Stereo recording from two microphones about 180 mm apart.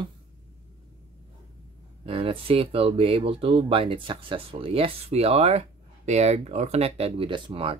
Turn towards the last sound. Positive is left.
turn(degrees=-30)  # may be behind; listen again after turning